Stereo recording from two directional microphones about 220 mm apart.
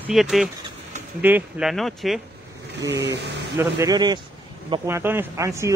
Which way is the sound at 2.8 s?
50° right (ahead or behind).